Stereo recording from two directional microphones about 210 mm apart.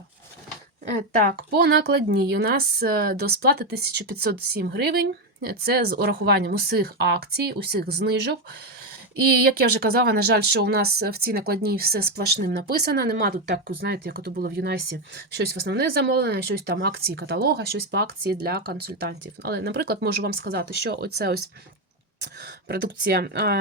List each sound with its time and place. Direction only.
1.2 s a woman's voice: 50° right (ahead or behind)
9.4 s a woman's voice: 50° right (ahead or behind)
22.2 s a woman's voice: 50° right (ahead or behind)